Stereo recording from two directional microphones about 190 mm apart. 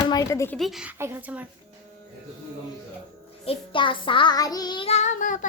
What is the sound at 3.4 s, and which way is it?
Child singing, 30° left (ahead or behind).